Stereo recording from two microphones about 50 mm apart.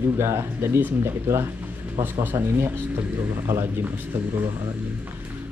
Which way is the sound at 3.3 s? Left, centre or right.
Right.